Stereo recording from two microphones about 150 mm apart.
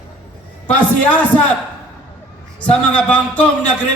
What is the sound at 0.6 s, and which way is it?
Speech, 10° left (ahead or behind).